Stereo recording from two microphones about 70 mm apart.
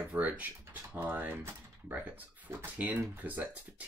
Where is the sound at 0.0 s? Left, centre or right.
Right.